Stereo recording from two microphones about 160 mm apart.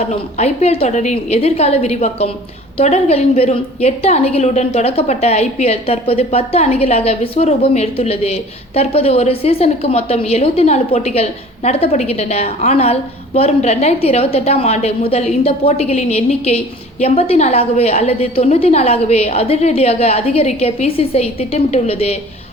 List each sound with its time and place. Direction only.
0.0 s a woman's voice: 45° left (ahead or behind)